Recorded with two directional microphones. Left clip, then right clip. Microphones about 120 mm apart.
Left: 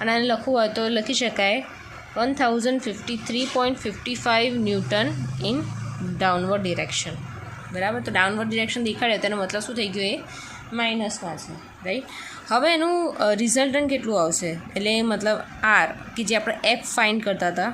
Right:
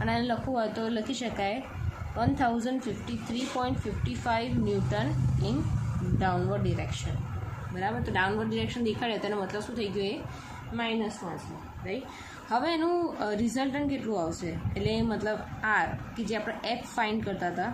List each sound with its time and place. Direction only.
0.0 s speech: 25° left (ahead or behind)
10.8 s a woman's voice: 80° left
11.9 s a woman's voice: 65° left (ahead or behind)
12.5 s speech: 40° left (ahead or behind)